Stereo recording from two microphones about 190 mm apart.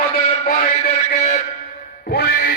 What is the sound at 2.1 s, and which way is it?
Music, 60° left (ahead or behind).